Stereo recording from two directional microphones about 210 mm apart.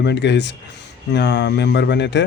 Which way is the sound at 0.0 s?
55° left (ahead or behind).